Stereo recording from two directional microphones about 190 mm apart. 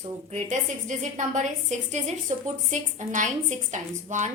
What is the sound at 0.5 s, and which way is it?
A woman's voice, 40° right (ahead or behind).